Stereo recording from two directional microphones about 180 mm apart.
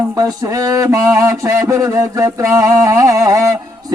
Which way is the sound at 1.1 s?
20° right (ahead or behind).